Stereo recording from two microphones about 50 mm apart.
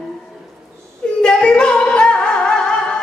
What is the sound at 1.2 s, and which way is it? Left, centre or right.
Music, centre.